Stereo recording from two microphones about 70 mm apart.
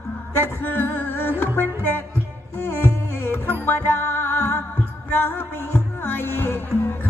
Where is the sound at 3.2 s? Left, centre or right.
Left.